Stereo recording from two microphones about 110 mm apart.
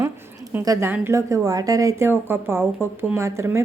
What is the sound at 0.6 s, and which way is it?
Speech, 30° right (ahead or behind).